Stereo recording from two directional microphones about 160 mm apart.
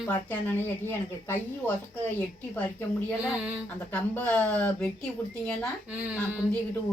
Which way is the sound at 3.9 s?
10° left (ahead or behind).